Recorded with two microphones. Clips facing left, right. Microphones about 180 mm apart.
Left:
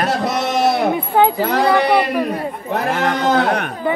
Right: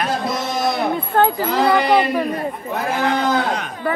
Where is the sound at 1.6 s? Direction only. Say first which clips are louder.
Even; 5° left (ahead or behind).